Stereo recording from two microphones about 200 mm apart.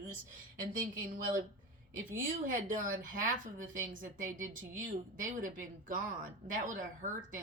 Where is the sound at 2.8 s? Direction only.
40° right (ahead or behind).